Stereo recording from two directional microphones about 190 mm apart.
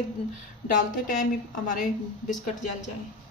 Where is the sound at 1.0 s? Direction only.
45° left (ahead or behind).